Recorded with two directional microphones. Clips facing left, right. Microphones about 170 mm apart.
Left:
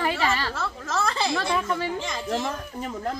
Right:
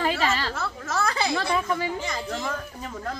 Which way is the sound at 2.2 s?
25° left (ahead or behind).